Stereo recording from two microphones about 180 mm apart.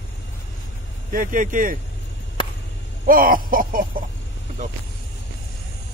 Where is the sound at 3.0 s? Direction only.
50° right (ahead or behind).